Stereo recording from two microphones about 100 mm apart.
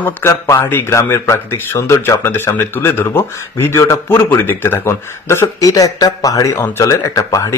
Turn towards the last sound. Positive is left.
turn(degrees=35)  # may be behind; listen again after turning